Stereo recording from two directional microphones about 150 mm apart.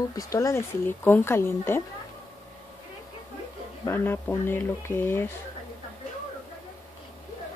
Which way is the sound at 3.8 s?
15° left (ahead or behind).